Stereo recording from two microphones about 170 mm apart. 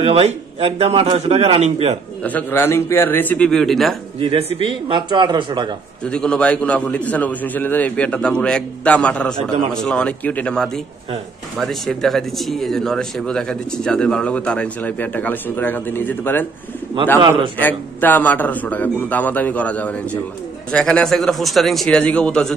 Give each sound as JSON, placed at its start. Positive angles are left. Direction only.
{"t": 0.0, "sound": "a man's voice", "side_deg": -35}
{"t": 2.2, "sound": "a man's voice", "side_deg": 10}
{"t": 4.2, "sound": "a man's voice", "side_deg": -30}
{"t": 6.0, "sound": "a man's voice", "side_deg": 5}
{"t": 17.6, "sound": "a man's voice", "side_deg": 10}